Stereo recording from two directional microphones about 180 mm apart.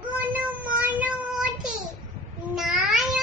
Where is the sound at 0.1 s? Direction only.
10° right (ahead or behind).